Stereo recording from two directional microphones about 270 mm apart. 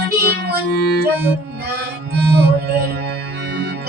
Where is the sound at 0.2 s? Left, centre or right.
Right.